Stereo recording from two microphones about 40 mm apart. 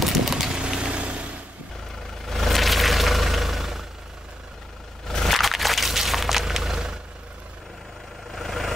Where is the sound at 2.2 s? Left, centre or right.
Centre.